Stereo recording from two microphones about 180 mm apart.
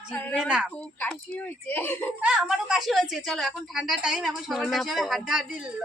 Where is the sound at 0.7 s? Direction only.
10° left (ahead or behind).